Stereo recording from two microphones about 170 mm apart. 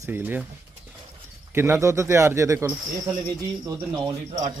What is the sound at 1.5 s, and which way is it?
Speech, 15° right (ahead or behind).